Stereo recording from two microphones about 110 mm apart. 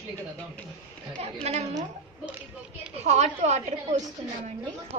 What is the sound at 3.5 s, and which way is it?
Speech, 90° right.